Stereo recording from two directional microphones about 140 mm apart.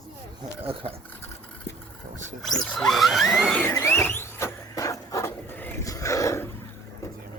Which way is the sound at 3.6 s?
15° left (ahead or behind).